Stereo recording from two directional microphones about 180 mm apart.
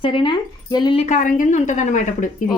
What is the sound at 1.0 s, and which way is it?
A woman's voice, 45° left (ahead or behind).